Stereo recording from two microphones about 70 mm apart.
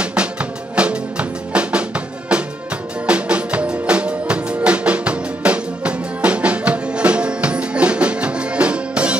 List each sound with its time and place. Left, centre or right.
0.0 s music: centre